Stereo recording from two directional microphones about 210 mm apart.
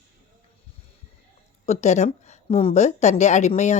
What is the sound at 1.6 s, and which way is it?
A woman's voice, 35° left (ahead or behind).